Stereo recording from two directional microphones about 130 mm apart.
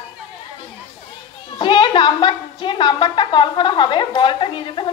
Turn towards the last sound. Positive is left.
turn(degrees=40)  # may be behind; listen again after turning